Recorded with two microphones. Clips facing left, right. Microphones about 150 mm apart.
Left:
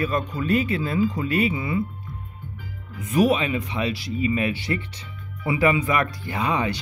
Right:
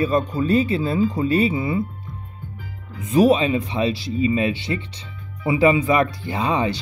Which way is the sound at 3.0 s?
25° right (ahead or behind).